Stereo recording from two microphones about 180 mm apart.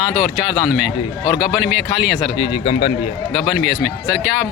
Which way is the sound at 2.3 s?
25° left (ahead or behind).